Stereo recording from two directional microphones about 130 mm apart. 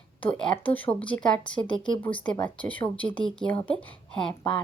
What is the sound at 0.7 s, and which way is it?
Speech, 10° left (ahead or behind).